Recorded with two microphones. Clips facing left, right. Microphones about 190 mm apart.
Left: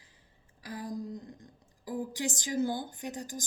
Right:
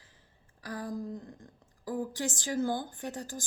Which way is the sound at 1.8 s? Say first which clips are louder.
Right 1 dB; 15° left (ahead or behind).